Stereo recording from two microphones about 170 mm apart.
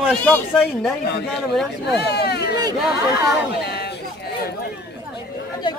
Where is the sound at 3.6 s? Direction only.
75° left (ahead or behind).